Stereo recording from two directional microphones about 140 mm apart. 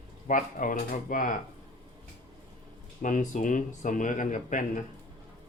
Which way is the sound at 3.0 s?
65° left (ahead or behind).